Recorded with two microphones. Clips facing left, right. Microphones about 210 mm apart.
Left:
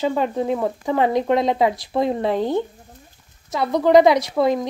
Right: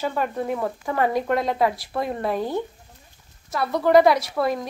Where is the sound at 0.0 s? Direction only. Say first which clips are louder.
Left 5 dB; 20° left (ahead or behind).